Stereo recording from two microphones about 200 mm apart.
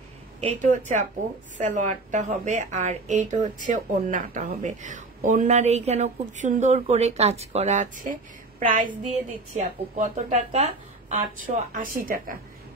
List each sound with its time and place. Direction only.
0.6 s speech: 40° right (ahead or behind)